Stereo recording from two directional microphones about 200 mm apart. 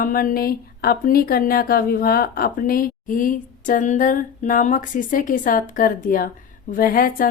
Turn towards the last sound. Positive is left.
turn(degrees=45)  # may be behind; listen again after turning